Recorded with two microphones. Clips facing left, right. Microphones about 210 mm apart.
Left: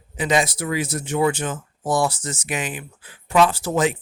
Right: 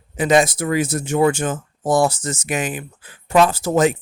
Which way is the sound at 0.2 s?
50° right (ahead or behind).